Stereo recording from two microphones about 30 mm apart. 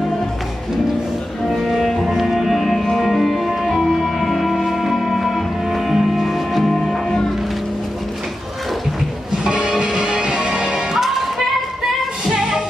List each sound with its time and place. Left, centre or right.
1.5 s music: centre
6.7 s music: left
9.4 s music: right; by 11.4 s centre